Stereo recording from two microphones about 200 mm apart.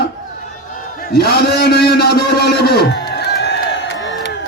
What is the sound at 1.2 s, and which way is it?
A man's voice, 55° left (ahead or behind).